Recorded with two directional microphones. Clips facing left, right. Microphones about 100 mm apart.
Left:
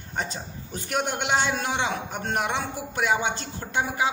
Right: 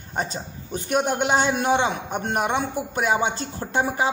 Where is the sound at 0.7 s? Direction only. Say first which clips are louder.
Right 5 dB; 25° right (ahead or behind).